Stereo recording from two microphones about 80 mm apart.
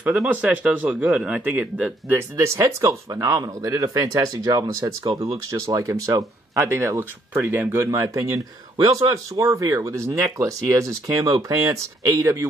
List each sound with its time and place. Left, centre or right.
0.3 s speech: centre
1.4 s speech: right
2.3 s speech: right